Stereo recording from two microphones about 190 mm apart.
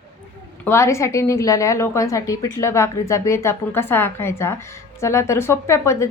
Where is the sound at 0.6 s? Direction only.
15° left (ahead or behind).